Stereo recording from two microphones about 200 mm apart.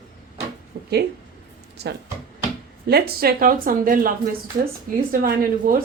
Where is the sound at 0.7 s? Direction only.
55° right (ahead or behind).